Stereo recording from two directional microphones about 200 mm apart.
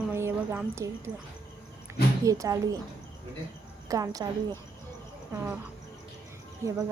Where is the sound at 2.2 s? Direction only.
15° right (ahead or behind).